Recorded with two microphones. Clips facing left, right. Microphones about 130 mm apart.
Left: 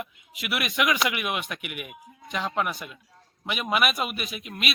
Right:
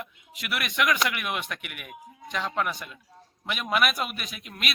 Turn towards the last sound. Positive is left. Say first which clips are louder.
# left 4 dB
turn(degrees=5)  # may be behind; listen again after turning